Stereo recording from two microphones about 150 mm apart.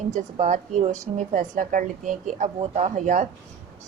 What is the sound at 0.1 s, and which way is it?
A woman's voice, 55° right (ahead or behind).